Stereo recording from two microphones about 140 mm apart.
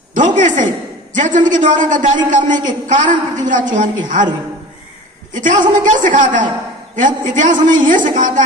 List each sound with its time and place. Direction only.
0.1 s a woman's voice: 65° right (ahead or behind)
5.3 s a woman's voice: 65° right (ahead or behind)